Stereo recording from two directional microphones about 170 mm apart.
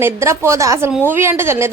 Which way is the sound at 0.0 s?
15° right (ahead or behind).